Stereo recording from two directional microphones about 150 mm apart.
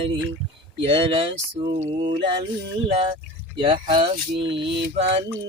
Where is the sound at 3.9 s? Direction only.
35° right (ahead or behind).